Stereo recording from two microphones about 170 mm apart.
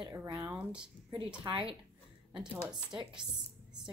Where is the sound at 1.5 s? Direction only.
30° right (ahead or behind).